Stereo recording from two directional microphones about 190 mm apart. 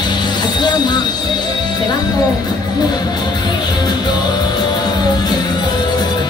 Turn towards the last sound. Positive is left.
turn(degrees=20)  # may be behind; listen again after turning